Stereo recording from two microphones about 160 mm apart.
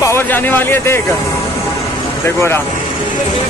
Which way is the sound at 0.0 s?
15° left (ahead or behind).